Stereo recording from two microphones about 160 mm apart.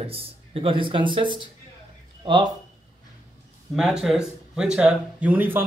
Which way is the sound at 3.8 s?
Centre (ahead or behind).